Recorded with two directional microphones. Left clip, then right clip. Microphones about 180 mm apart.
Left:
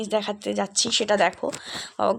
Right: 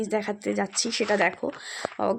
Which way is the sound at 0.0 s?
15° right (ahead or behind).